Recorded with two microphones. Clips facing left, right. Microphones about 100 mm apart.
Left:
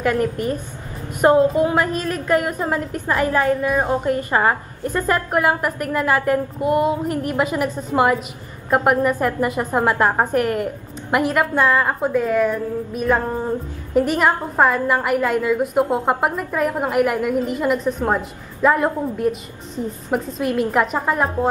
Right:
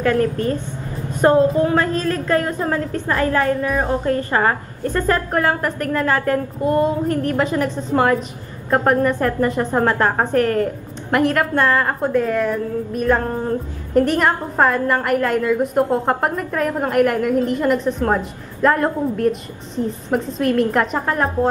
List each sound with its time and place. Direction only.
0.0 s a woman's voice: 15° left (ahead or behind)